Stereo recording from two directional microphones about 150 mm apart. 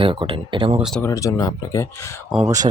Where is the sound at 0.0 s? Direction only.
35° right (ahead or behind).